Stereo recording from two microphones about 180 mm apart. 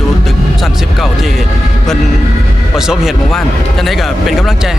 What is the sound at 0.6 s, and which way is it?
Speech, centre (ahead or behind).